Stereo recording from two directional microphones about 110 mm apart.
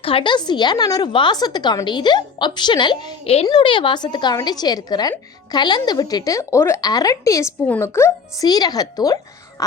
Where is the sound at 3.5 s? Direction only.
50° left (ahead or behind); by 8.5 s 25° left (ahead or behind).